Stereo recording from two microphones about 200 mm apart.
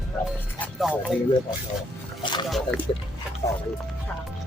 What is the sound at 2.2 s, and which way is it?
Speech, 20° left (ahead or behind).